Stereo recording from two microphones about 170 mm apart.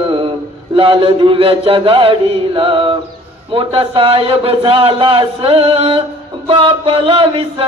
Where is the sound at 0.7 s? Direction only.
30° right (ahead or behind).